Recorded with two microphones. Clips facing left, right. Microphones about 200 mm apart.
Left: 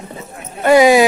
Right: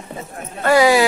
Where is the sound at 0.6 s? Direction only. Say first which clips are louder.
Left 4 dB; 20° left (ahead or behind).